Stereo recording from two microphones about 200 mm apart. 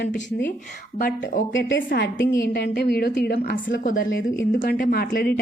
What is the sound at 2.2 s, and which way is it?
Speech, 15° left (ahead or behind).